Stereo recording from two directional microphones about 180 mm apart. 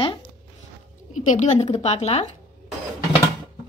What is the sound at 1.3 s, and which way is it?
Speech, 40° left (ahead or behind).